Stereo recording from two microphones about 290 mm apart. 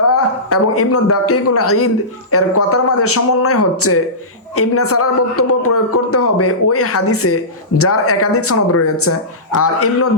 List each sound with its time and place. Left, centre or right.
0.1 s a man's voice: left